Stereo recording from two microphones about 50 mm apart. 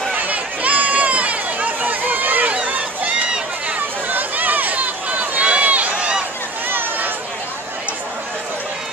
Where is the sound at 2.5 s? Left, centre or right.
Right.